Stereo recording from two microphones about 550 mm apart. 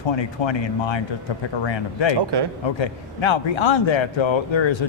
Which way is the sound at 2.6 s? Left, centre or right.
Left.